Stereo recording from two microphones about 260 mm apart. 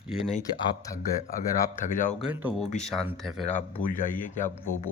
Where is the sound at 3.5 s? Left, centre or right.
Left.